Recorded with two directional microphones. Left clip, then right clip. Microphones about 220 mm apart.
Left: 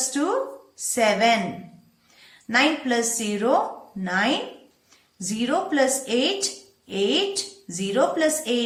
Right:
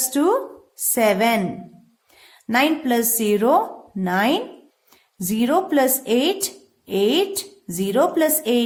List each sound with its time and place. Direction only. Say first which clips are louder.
0.1 s a woman's voice: right 8 dB; 45° right (ahead or behind)